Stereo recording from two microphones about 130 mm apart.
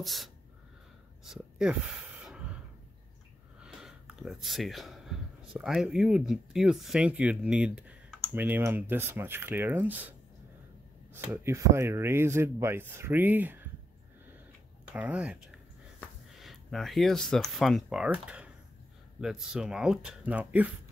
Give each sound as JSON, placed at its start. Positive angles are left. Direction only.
{"t": 0.0, "sound": "speech", "side_deg": 0}
{"t": 2.2, "sound": "a sound", "side_deg": -10}
{"t": 3.5, "sound": "speech", "side_deg": -5}
{"t": 11.4, "sound": "speech", "side_deg": -20}
{"t": 14.9, "sound": "speech", "side_deg": -10}
{"t": 16.3, "sound": "speech", "side_deg": 0}